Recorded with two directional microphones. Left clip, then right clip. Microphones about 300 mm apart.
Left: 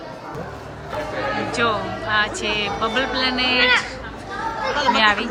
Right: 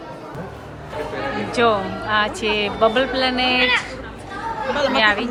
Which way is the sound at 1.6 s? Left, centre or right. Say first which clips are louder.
Right 5 dB; centre.